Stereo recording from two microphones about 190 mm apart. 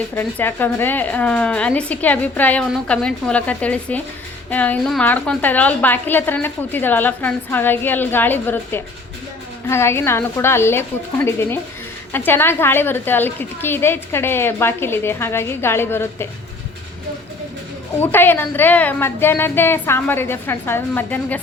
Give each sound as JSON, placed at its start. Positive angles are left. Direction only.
{"t": 0.2, "sound": "a woman's voice", "side_deg": 10}
{"t": 18.0, "sound": "a woman's voice", "side_deg": 10}